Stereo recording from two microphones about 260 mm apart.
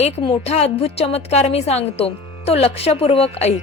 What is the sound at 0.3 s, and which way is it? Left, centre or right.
A woman's voice, left.